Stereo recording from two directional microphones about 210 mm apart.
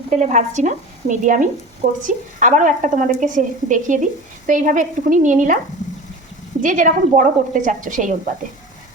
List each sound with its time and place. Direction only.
0.1 s speech: 35° right (ahead or behind)
6.6 s speech: 40° right (ahead or behind)